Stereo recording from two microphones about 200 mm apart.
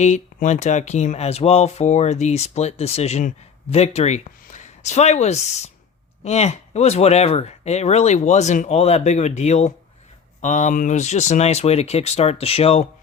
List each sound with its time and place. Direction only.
0.0 s speech: 35° left (ahead or behind)